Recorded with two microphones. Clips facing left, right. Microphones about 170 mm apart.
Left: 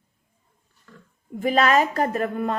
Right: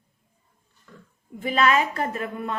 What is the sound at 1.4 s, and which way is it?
A woman's voice, 40° left (ahead or behind).